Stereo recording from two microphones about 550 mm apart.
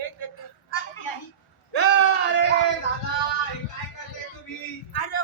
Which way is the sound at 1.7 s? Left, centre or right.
Left.